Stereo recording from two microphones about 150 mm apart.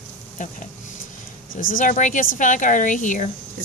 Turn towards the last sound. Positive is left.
turn(degrees=55)  # may be behind; listen again after turning